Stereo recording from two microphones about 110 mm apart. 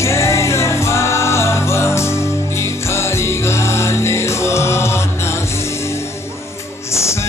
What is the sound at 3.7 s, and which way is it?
Music, 25° left (ahead or behind).